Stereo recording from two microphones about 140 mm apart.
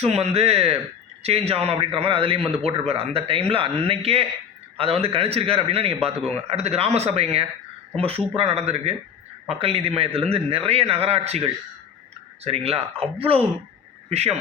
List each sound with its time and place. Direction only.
0.0 s a man's voice: 50° right (ahead or behind)